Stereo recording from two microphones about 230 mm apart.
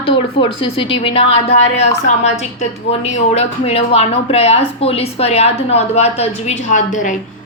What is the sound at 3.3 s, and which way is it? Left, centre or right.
Speech, left.